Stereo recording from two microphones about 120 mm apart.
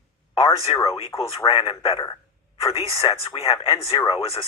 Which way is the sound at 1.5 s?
45° left (ahead or behind).